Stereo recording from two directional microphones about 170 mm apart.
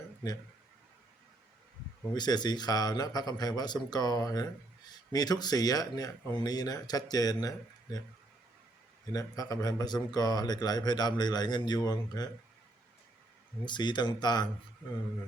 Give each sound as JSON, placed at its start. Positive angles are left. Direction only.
{"t": 2.1, "sound": "speech", "side_deg": 25}
{"t": 9.1, "sound": "speech", "side_deg": 20}
{"t": 13.7, "sound": "speech", "side_deg": 25}